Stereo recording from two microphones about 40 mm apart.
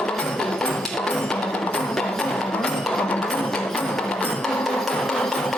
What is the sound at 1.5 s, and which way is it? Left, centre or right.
Music, left.